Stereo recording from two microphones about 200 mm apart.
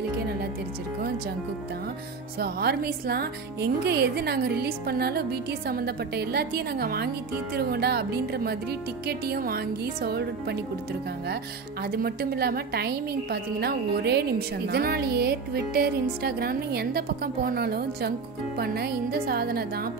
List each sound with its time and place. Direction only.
2.3 s speech: 50° right (ahead or behind)
11.8 s speech: 50° right (ahead or behind)